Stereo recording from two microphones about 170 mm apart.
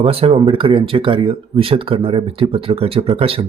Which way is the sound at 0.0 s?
35° right (ahead or behind).